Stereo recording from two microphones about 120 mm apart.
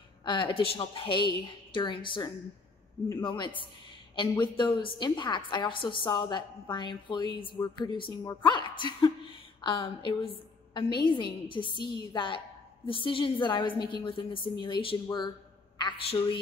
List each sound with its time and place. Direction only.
0.2 s a woman's voice: 40° left (ahead or behind)